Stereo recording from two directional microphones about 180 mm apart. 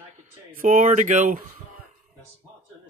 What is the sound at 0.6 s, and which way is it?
Speech, 45° right (ahead or behind).